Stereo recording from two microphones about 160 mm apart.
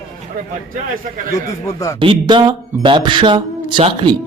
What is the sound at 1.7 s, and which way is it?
Speech, 20° left (ahead or behind).